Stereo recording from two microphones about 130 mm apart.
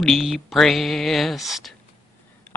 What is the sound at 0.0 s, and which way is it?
Speech, centre (ahead or behind).